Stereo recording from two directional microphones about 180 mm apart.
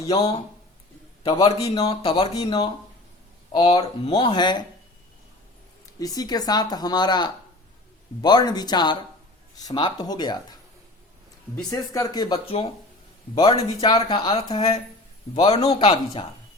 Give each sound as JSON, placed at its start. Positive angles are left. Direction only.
{"t": 0.1, "sound": "speech", "side_deg": 30}
{"t": 6.0, "sound": "speech", "side_deg": 20}
{"t": 11.7, "sound": "speech", "side_deg": 20}